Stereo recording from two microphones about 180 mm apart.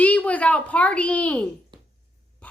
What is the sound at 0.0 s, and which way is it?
A woman's voice, 10° left (ahead or behind).